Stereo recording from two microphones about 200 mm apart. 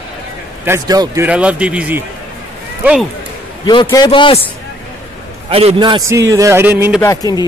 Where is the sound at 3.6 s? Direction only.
20° left (ahead or behind).